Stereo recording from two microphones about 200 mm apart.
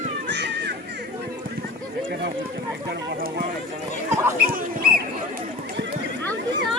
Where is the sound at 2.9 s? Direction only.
50° right (ahead or behind).